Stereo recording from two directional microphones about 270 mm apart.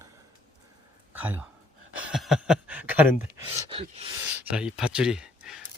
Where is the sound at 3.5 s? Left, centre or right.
Centre.